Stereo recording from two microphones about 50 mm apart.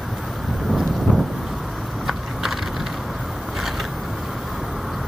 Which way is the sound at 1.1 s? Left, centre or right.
Centre.